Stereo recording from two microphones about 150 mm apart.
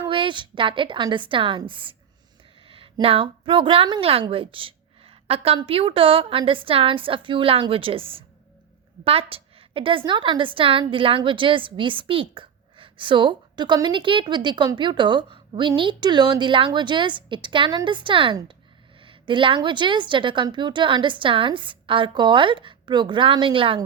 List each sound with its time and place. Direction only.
0.1 s a woman's voice: 35° right (ahead or behind)